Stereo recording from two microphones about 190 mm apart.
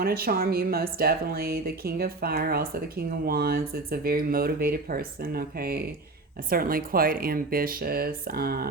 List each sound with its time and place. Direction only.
0.0 s speech: 55° right (ahead or behind)